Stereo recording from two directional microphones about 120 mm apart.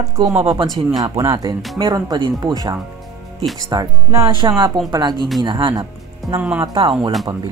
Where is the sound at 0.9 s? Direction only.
30° right (ahead or behind).